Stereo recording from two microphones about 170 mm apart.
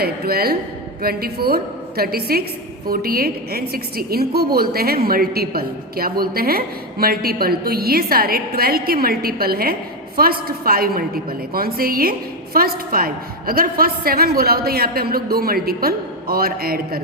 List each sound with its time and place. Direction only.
0.0 s a woman's voice: 65° right (ahead or behind)